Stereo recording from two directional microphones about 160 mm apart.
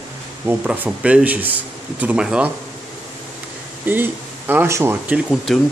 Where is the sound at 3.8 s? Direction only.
10° right (ahead or behind).